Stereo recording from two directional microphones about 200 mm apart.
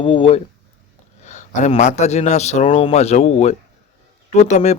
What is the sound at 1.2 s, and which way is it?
Speech, 35° left (ahead or behind).